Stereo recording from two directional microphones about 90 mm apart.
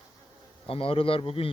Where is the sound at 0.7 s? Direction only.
90° left.